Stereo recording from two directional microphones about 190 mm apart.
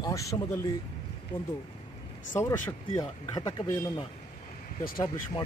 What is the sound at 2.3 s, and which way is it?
Speech, 15° left (ahead or behind).